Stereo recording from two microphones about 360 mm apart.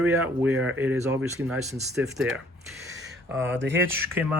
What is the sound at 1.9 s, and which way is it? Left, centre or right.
Speech, centre.